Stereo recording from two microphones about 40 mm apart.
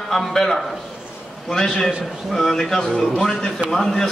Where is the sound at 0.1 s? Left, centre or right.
Centre.